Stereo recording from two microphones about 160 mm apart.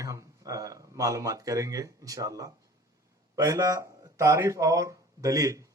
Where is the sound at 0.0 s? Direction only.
20° right (ahead or behind).